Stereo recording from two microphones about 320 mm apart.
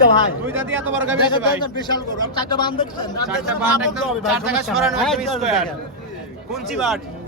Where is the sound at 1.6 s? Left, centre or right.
Centre.